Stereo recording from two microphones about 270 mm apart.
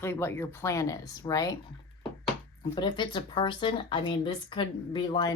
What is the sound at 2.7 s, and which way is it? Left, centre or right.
Speech, centre.